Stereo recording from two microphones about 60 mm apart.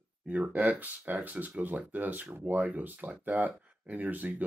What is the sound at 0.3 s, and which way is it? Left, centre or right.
Speech, right.